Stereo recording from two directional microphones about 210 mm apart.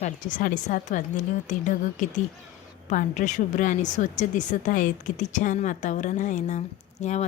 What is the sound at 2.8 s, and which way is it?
A woman's voice, 40° left (ahead or behind).